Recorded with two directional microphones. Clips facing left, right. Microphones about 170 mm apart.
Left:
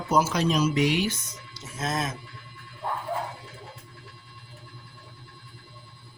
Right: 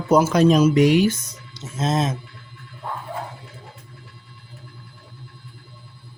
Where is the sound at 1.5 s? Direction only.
25° right (ahead or behind).